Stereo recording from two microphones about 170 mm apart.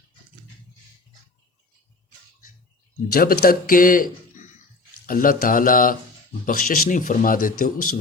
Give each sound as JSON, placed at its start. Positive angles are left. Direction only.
{"t": 3.1, "sound": "a man's voice", "side_deg": 60}